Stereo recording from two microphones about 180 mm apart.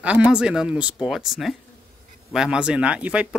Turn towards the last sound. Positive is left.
turn(degrees=-5)  # may be behind; listen again after turning